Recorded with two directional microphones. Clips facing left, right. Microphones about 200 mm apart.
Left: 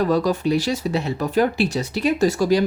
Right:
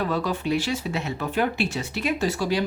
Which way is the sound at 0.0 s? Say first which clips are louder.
Left 7 dB; 40° left (ahead or behind).